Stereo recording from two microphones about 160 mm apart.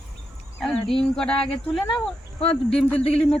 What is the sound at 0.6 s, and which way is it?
Speech, 5° left (ahead or behind).